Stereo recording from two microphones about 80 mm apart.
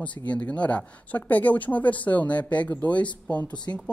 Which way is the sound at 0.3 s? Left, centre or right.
Centre.